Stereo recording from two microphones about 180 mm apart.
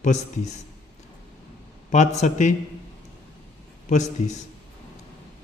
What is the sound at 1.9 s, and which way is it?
Speech, 40° left (ahead or behind).